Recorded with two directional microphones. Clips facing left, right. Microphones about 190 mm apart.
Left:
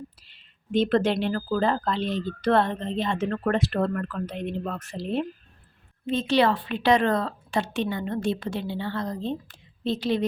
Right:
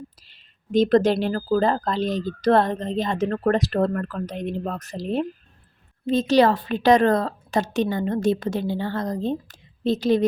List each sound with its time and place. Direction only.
0.2 s speech: 40° right (ahead or behind)